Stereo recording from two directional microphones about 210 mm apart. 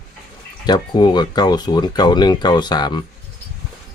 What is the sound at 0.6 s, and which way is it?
Speech, 20° left (ahead or behind).